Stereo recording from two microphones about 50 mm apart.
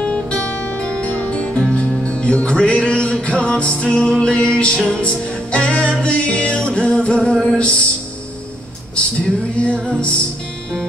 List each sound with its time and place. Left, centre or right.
0.0 s guitar: centre
0.5 s music: left
9.2 s music: left